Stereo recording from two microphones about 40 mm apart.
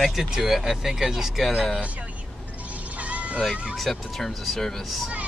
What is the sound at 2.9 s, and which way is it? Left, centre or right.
Vehicle, right.